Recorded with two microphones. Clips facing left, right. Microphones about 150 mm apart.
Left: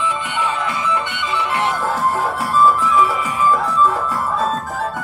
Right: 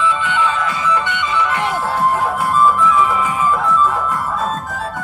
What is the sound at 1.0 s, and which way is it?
Music, 65° left (ahead or behind).